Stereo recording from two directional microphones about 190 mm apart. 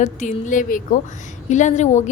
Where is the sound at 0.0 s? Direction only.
40° left (ahead or behind).